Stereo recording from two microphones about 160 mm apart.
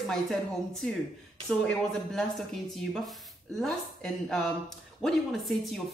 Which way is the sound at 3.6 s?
5° left (ahead or behind).